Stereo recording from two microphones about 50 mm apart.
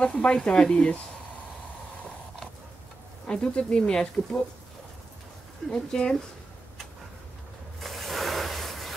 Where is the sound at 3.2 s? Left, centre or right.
Left.